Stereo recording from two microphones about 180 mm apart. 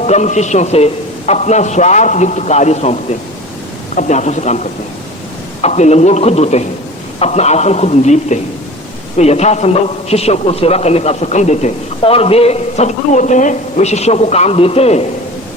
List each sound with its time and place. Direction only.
0.0 s a man's voice: 40° left (ahead or behind)